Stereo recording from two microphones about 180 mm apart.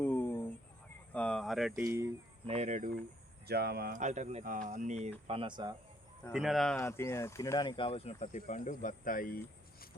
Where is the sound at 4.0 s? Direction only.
40° right (ahead or behind); by 5.8 s 25° right (ahead or behind).